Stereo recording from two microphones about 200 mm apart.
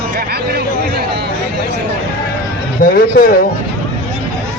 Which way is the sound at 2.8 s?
50° left (ahead or behind).